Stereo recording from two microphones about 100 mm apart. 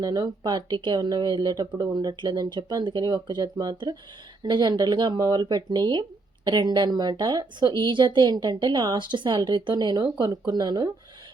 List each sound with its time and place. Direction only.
0.0 s speech: 40° right (ahead or behind)